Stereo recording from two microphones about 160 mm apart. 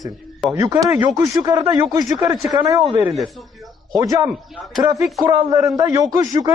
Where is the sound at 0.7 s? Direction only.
20° right (ahead or behind).